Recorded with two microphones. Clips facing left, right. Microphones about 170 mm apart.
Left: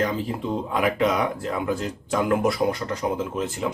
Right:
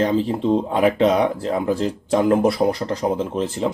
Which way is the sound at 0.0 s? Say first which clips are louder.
Right 6 dB; 30° right (ahead or behind).